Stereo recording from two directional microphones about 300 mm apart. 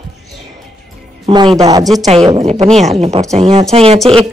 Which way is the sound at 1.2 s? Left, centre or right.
Centre.